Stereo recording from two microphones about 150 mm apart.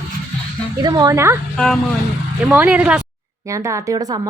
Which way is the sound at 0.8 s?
25° right (ahead or behind).